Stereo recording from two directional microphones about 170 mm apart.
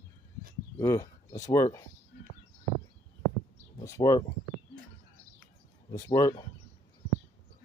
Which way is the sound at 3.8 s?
20° left (ahead or behind).